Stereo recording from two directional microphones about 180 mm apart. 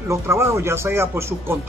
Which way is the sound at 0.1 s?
15° right (ahead or behind).